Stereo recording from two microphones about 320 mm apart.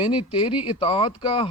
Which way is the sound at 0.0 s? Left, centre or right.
Centre.